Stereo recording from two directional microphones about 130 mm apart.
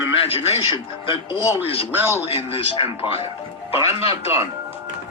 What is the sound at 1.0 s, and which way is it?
Speech, 40° left (ahead or behind).